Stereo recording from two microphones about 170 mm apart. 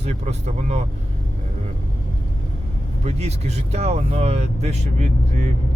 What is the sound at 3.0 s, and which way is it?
Speech, 40° right (ahead or behind).